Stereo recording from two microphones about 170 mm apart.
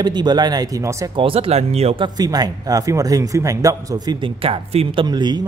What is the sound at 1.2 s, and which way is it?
Speech, 35° right (ahead or behind).